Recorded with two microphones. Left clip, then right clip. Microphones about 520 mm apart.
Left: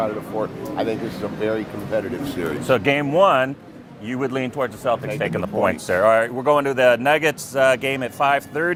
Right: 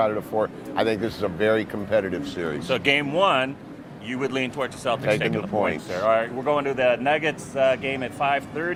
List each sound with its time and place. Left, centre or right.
0.0 s speech: right
2.6 s speech: left